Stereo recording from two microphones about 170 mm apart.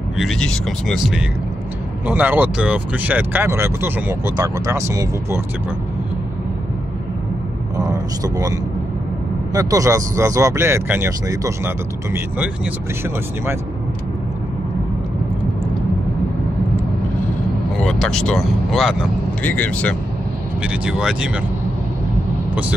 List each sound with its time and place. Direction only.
0.2 s speech: 5° left (ahead or behind); by 5.4 s 15° right (ahead or behind)
7.7 s speech: 20° right (ahead or behind)
17.8 s speech: 5° left (ahead or behind)
20.6 s speech: 5° right (ahead or behind)